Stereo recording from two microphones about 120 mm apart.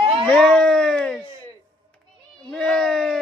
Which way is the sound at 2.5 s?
5° left (ahead or behind).